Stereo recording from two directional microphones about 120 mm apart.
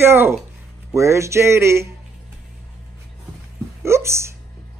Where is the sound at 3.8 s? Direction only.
20° right (ahead or behind).